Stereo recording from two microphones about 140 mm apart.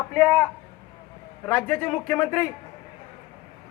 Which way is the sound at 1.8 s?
15° left (ahead or behind).